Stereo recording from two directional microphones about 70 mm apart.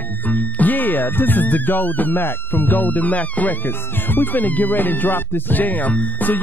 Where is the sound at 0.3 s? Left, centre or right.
Left.